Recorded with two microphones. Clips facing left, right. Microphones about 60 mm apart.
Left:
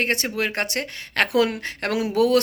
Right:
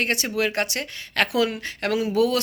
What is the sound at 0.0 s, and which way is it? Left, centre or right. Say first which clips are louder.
A woman's voice: even; left.